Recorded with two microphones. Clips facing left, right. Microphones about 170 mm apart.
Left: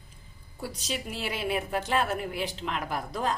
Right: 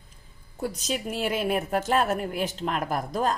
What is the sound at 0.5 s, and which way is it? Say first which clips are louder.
Speech: right 5 dB; 50° right (ahead or behind).